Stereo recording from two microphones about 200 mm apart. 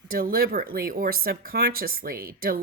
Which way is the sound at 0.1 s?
45° right (ahead or behind).